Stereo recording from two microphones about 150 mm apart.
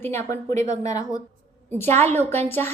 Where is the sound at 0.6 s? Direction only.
50° right (ahead or behind).